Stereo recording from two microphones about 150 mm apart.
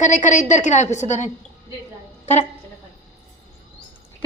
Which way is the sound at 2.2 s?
50° left (ahead or behind).